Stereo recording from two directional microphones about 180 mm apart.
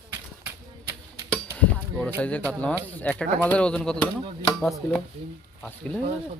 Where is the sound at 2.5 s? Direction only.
5° left (ahead or behind).